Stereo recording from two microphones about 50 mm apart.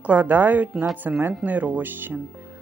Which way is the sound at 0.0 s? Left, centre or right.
Right.